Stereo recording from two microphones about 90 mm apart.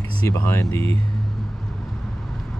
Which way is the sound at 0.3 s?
30° left (ahead or behind).